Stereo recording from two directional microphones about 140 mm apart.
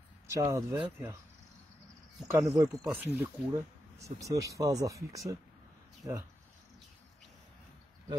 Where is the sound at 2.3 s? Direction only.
20° right (ahead or behind).